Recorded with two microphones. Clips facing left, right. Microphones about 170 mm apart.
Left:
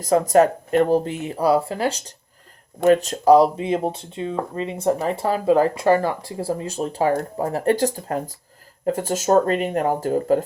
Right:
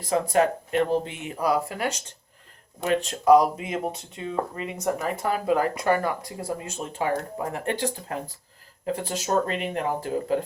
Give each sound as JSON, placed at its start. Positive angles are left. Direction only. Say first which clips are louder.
{"t": 0.0, "sound": "speech", "louder": "left 6 dB", "side_deg": 40}
{"t": 2.8, "sound": "speech", "louder": "left 6 dB", "side_deg": 40}